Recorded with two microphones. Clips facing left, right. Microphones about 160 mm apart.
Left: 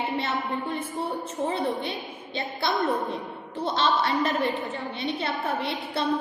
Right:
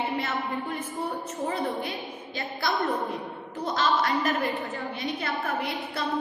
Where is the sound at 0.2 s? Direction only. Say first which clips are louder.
Left 1 dB; 30° left (ahead or behind).